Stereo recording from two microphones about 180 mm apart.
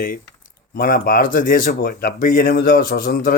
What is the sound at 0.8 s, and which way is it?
Speech, 55° left (ahead or behind).